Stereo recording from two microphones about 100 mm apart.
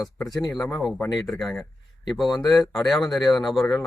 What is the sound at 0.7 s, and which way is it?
Speech, 5° left (ahead or behind).